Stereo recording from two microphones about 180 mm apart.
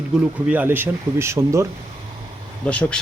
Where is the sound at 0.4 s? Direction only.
10° right (ahead or behind).